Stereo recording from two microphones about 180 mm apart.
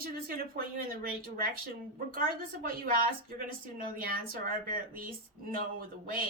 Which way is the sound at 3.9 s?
55° right (ahead or behind).